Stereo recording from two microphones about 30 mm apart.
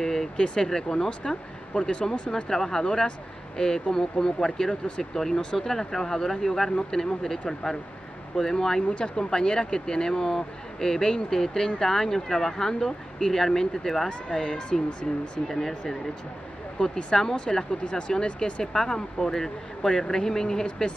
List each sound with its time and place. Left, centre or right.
0.0 s vehicle: centre
0.7 s speech: left
1.2 s speech: left
2.5 s speech: centre
2.8 s speech: left
5.7 s speech: centre
8.9 s speech: left
14.5 s speech: left
15.5 s speech: centre
17.5 s speech: left
18.6 s speech: centre